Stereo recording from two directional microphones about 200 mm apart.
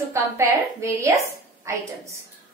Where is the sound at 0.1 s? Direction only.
15° right (ahead or behind).